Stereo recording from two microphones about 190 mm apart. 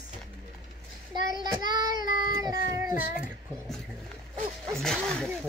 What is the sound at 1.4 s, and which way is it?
Child singing, 20° right (ahead or behind).